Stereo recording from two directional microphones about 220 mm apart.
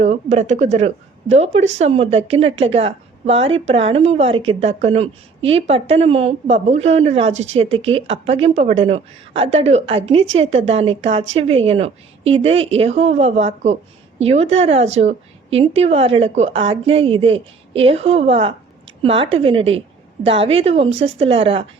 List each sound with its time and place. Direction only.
0.0 s a woman's voice: 30° right (ahead or behind)